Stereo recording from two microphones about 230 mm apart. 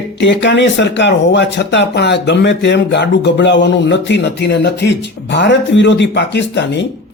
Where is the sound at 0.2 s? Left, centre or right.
Left.